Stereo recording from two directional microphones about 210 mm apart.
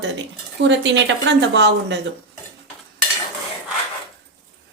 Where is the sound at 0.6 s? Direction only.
60° right (ahead or behind).